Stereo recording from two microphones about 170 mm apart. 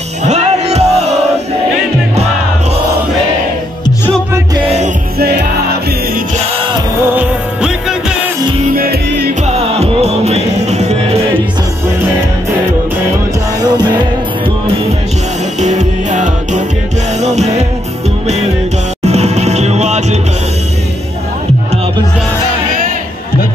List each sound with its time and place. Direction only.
0.2 s music: 40° right (ahead or behind)
5.2 s music: 75° right (ahead or behind)
8.7 s music: 65° right (ahead or behind)
9.5 s music: 40° right (ahead or behind)
13.6 s music: 25° right (ahead or behind)
15.6 s music: 45° right (ahead or behind)
19.0 s music: 40° right (ahead or behind)